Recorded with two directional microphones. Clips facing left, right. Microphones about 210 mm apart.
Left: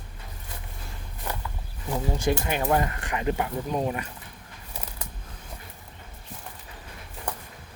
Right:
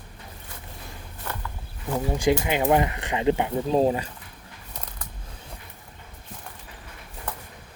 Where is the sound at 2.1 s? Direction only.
15° right (ahead or behind).